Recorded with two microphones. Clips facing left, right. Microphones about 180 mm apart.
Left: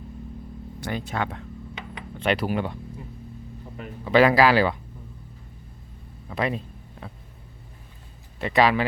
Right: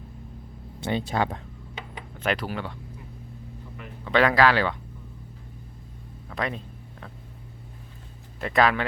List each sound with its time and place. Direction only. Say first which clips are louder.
0.8 s speech: right 3 dB; 25° right (ahead or behind)
2.1 s speech: left 3 dB; centre (ahead or behind)
2.4 s speech: left 6 dB; 15° left (ahead or behind)
4.0 s speech: left 3 dB; 5° left (ahead or behind)
6.2 s speech: left 4 dB; 5° left (ahead or behind)
8.4 s speech: left 2 dB; centre (ahead or behind)